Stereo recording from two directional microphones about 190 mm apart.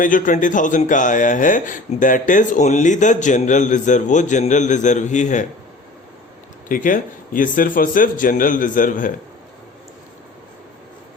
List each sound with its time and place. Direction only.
0.0 s speech: 45° left (ahead or behind)
6.7 s speech: 45° left (ahead or behind)